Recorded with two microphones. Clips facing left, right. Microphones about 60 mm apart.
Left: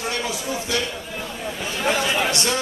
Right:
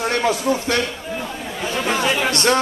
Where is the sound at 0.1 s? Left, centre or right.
Right.